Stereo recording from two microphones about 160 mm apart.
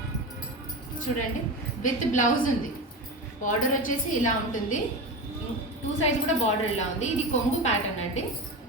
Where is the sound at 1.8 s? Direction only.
55° left (ahead or behind).